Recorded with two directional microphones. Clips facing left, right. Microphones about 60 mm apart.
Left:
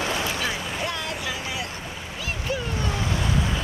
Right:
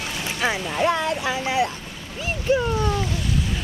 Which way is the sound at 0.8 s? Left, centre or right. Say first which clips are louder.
Right 12 dB; right.